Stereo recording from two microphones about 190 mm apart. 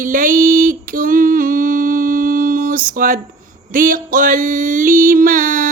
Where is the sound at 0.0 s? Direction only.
45° right (ahead or behind).